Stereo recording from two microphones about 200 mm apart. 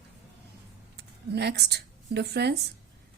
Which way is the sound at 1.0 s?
55° right (ahead or behind).